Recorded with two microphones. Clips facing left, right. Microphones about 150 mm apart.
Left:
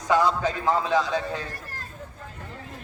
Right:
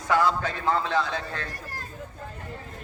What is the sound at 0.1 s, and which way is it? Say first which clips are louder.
Speech: left 2 dB; 15° left (ahead or behind).